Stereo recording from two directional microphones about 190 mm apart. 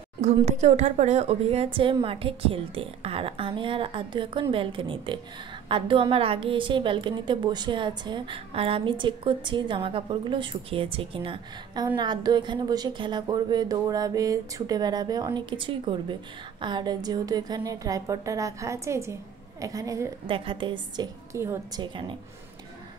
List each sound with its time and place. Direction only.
0.2 s a woman's voice: 35° right (ahead or behind); by 21.8 s 15° right (ahead or behind)